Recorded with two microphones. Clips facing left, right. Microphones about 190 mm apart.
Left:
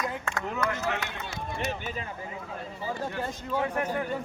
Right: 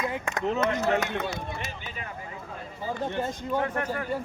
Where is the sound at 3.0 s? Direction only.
20° right (ahead or behind).